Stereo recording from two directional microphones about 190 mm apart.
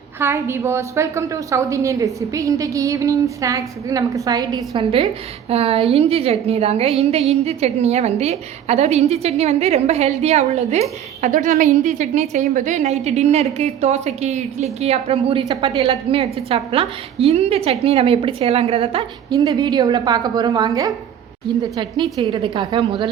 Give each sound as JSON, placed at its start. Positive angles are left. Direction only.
{"t": 0.2, "sound": "a woman's voice", "side_deg": -15}
{"t": 22.2, "sound": "a woman's voice", "side_deg": -25}